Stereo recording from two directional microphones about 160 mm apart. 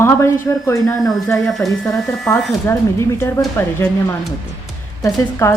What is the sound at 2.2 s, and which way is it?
Speech, 15° left (ahead or behind).